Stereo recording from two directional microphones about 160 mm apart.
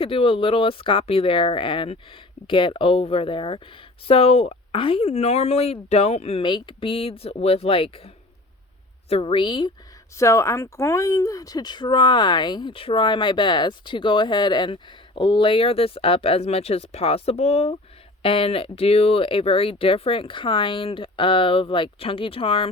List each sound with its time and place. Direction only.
0.0 s speech: 35° left (ahead or behind)
10.2 s speech: 20° left (ahead or behind); by 22.7 s 35° left (ahead or behind)